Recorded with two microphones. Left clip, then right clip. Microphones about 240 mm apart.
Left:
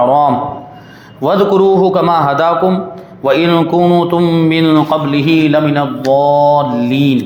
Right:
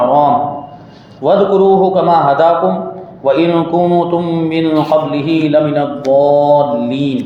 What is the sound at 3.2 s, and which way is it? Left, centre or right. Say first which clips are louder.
Mantra: left 1 dB; left.